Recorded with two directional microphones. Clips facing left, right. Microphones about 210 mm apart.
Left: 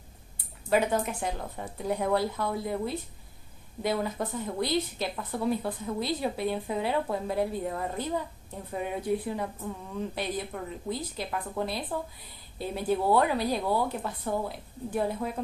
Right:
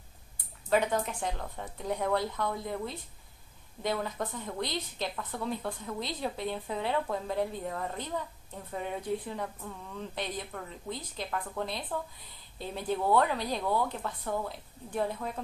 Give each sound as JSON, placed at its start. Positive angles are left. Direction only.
{"t": 0.7, "sound": "speech", "side_deg": 10}